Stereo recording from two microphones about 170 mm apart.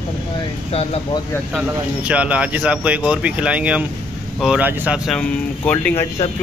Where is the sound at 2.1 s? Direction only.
5° right (ahead or behind).